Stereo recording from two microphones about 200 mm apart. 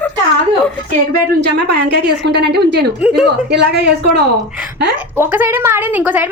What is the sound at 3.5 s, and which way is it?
Speech, 55° right (ahead or behind).